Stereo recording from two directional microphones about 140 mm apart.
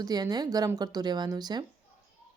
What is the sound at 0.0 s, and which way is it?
Speech, 30° right (ahead or behind).